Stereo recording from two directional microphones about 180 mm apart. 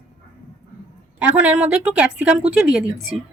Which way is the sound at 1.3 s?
5° right (ahead or behind).